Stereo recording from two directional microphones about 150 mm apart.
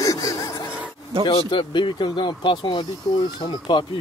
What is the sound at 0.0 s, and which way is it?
Gasp, 20° left (ahead or behind).